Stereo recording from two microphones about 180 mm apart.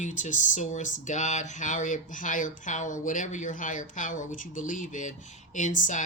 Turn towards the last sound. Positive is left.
turn(degrees=45)  # may be behind; listen again after turning